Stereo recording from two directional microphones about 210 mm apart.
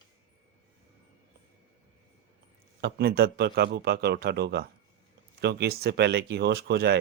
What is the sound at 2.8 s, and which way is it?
Speech, 50° right (ahead or behind).